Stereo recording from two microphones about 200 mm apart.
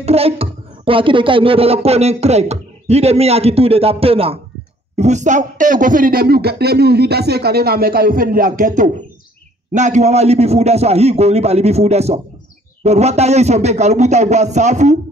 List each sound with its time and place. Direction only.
0.0 s a woman's voice: 30° right (ahead or behind)